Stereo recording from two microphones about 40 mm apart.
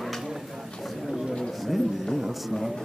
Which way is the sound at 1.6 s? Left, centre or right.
Centre.